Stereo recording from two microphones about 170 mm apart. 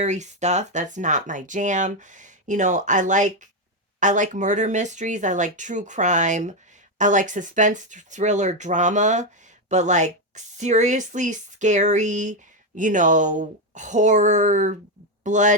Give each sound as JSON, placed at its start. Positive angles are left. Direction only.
{"t": 0.0, "sound": "speech", "side_deg": -45}